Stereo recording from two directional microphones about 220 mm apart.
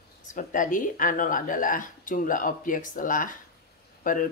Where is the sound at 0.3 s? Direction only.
35° left (ahead or behind).